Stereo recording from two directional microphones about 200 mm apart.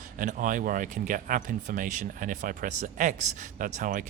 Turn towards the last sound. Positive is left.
turn(degrees=-40)  # may be behind; listen again after turning